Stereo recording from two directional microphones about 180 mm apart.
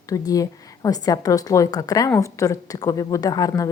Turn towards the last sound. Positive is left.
turn(degrees=20)  # may be behind; listen again after turning